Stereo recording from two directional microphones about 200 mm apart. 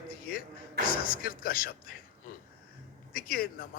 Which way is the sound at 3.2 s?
45° left (ahead or behind).